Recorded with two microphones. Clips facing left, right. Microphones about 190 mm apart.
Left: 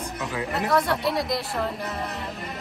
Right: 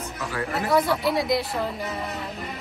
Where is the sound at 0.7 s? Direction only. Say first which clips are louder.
Right 2 dB; centre (ahead or behind).